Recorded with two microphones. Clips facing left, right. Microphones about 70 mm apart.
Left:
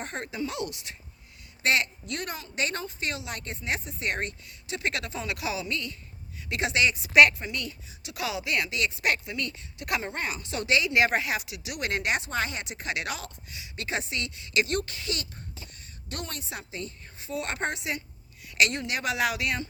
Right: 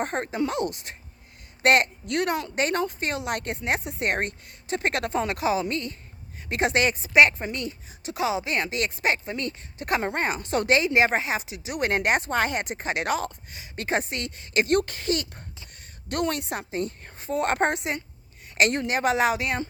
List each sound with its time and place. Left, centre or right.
0.0 s a woman's voice: right
2.6 s speech: right
7.1 s a woman's voice: right
9.0 s speech: right
16.0 s speech: right